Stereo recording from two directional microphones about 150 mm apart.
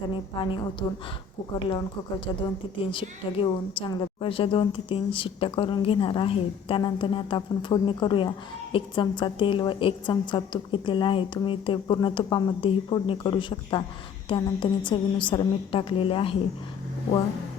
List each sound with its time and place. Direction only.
0.1 s a woman's voice: 35° left (ahead or behind)
2.9 s a woman's voice: 35° left (ahead or behind)